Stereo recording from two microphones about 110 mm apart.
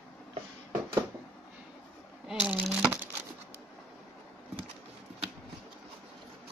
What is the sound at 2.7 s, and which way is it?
Crumpling, 10° right (ahead or behind).